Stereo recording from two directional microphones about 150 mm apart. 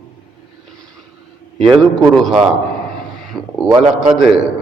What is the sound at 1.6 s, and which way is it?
A man's voice, centre (ahead or behind).